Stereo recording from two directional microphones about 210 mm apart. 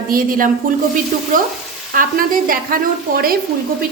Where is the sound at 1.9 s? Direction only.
40° right (ahead or behind).